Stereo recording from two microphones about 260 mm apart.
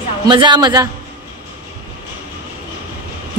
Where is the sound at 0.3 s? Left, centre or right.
Centre.